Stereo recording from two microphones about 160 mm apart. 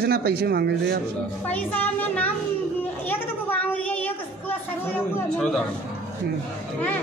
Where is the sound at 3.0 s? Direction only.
10° left (ahead or behind).